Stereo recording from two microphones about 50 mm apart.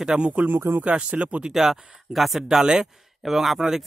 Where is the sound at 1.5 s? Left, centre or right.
Centre.